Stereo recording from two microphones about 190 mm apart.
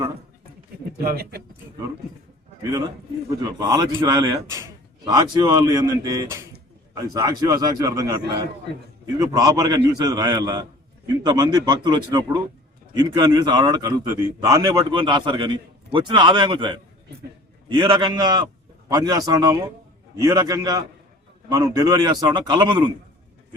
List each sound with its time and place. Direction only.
1.0 s speech: 55° right (ahead or behind)
2.7 s a man's voice: 20° right (ahead or behind)
9.1 s a man's voice: 20° right (ahead or behind)